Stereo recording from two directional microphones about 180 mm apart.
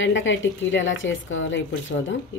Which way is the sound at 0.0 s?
90° left.